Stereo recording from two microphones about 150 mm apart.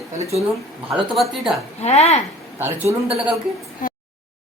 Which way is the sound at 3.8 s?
60° left (ahead or behind).